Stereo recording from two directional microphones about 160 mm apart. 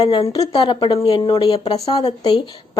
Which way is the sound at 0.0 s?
30° left (ahead or behind).